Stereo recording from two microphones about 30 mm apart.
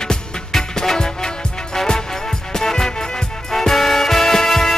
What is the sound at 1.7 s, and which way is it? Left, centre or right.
Music, left.